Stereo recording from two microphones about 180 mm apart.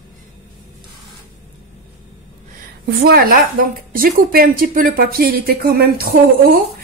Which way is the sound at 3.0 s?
55° right (ahead or behind).